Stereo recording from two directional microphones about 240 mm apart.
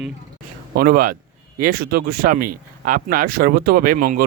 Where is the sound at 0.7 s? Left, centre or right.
Right.